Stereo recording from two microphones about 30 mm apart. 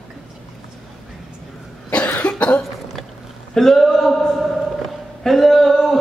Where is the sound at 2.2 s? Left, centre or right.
Left.